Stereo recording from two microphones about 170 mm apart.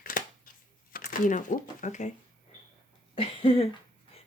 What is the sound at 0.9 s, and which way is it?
Speech, 55° left (ahead or behind).